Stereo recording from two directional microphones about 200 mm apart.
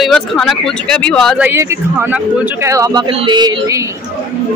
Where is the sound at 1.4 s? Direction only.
15° right (ahead or behind).